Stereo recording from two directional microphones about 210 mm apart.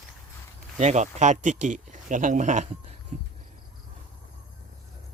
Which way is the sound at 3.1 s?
35° right (ahead or behind).